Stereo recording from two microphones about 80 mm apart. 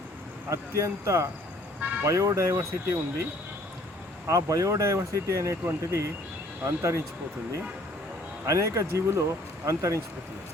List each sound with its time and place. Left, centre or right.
0.5 s speech: right
4.3 s speech: right
8.4 s speech: right